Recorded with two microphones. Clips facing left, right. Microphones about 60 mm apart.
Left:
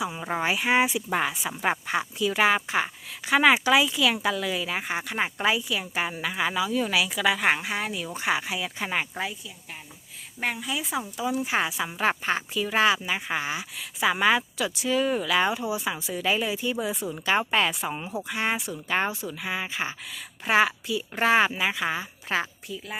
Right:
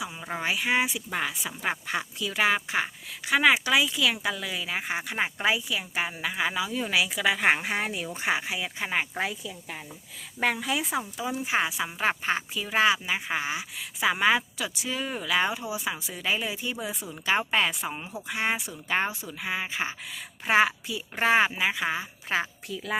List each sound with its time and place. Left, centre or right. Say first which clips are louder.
0.1 s speech: left 3 dB; centre
6.6 s speech: left 4 dB; centre
7.5 s speech: even; right
8.1 s speech: left 2 dB; right
10.4 s a woman's voice: right 3 dB; right
11.2 s speech: left 3 dB; centre
18.3 s speech: even; centre
22.7 s speech: right 1 dB; right